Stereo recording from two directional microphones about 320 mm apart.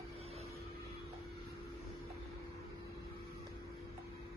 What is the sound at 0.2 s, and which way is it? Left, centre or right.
Vehicle, centre.